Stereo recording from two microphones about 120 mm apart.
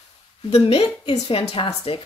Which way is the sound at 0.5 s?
55° left (ahead or behind).